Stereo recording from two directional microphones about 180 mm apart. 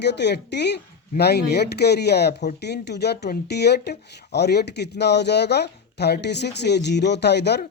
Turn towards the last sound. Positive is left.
turn(degrees=65)  # may be behind; listen again after turning